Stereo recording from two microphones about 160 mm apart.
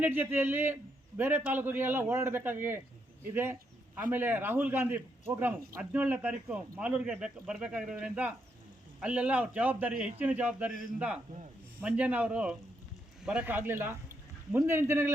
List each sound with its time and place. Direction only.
0.0 s speech: 10° right (ahead or behind)
3.3 s a sound: 15° right (ahead or behind)
4.1 s speech: 10° right (ahead or behind)
11.8 s speech: 10° right (ahead or behind)